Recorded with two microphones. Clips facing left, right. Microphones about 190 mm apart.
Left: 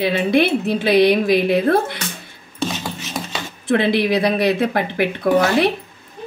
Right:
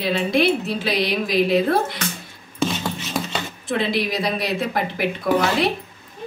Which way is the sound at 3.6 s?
60° left (ahead or behind).